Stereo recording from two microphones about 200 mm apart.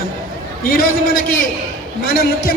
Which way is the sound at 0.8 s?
45° left (ahead or behind).